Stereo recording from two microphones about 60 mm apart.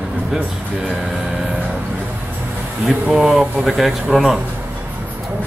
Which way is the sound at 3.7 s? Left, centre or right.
Centre.